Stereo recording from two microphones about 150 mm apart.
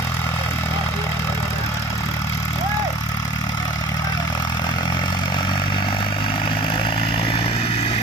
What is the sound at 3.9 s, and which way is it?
Vehicle, 25° left (ahead or behind).